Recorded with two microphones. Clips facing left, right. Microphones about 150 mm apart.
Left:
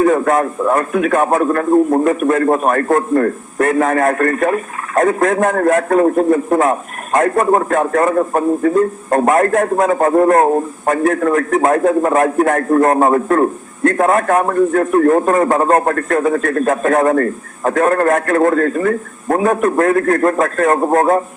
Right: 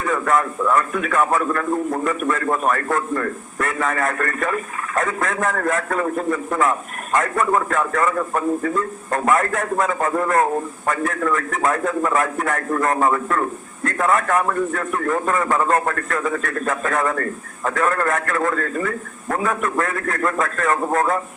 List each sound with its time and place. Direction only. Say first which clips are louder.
0.0 s a man's voice: left 7 dB; 40° left (ahead or behind)
5.3 s a man's voice: left 8 dB; 55° left (ahead or behind)
5.5 s a man's voice: left 9 dB; 40° left (ahead or behind)